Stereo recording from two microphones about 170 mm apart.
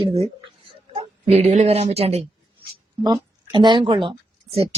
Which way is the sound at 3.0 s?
25° right (ahead or behind).